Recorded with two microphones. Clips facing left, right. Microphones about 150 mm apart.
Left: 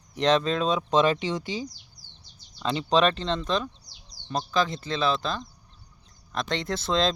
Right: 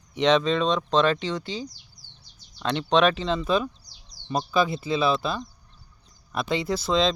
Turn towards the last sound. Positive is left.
turn(degrees=0)  # may be behind; listen again after turning